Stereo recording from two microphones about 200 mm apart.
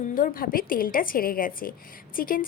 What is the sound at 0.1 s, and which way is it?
A woman's voice, 45° left (ahead or behind).